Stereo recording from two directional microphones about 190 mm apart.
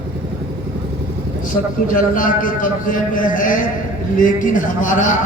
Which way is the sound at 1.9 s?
45° left (ahead or behind).